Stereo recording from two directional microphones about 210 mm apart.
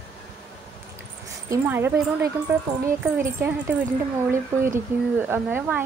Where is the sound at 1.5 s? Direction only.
10° right (ahead or behind).